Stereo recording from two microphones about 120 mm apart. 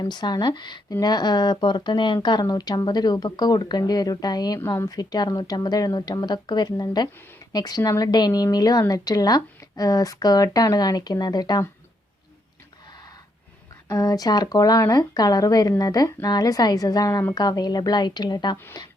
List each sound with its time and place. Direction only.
0.0 s speech: 35° left (ahead or behind)
13.8 s speech: 30° left (ahead or behind)
18.5 s speech: 20° left (ahead or behind)